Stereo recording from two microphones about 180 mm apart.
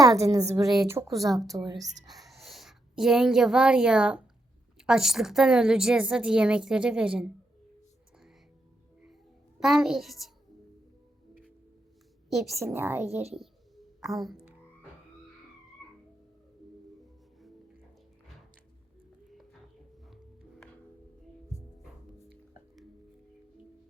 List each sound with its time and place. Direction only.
0.0 s a woman's voice: 20° right (ahead or behind)
2.0 s a woman's voice: centre (ahead or behind)
9.6 s a woman's voice: centre (ahead or behind)
12.5 s a woman's voice: 15° right (ahead or behind)
13.3 s bird: centre (ahead or behind)